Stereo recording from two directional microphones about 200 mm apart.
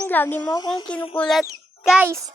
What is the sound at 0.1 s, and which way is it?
Speech, 10° left (ahead or behind).